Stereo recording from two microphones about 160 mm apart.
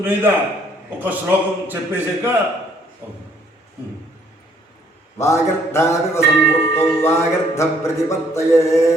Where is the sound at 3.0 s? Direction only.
15° right (ahead or behind).